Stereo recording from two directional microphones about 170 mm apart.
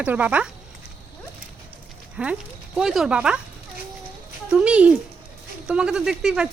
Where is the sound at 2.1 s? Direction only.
5° right (ahead or behind).